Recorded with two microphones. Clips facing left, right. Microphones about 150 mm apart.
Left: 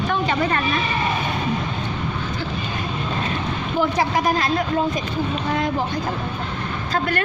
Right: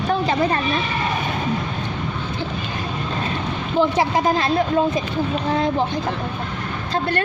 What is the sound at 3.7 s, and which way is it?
Speech, 25° right (ahead or behind).